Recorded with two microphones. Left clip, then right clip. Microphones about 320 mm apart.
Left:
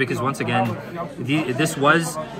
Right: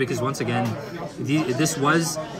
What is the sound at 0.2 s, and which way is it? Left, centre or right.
A man's voice, centre.